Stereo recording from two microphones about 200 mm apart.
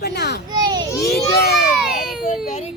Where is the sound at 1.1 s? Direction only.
50° left (ahead or behind).